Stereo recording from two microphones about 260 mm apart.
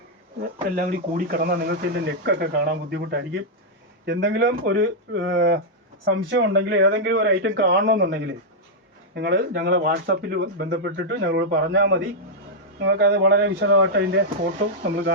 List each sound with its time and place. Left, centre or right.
0.8 s speech: right